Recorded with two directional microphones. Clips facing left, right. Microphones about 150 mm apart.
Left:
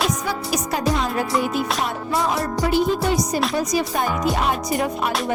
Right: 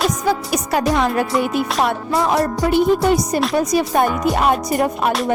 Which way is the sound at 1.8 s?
60° right (ahead or behind).